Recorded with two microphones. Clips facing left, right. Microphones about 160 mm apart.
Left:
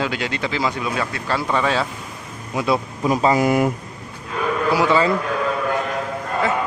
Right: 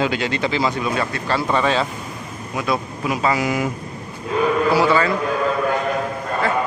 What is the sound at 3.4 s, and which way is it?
Speech, 50° left (ahead or behind).